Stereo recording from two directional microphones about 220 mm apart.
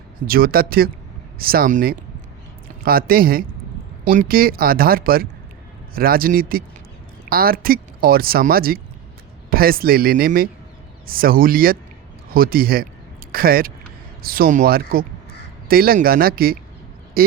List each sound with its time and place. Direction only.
0.3 s speech: 40° right (ahead or behind)